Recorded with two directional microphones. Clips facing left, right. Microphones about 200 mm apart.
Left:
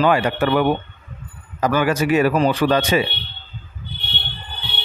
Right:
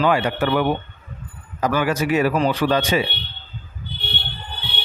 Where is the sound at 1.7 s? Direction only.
50° left (ahead or behind).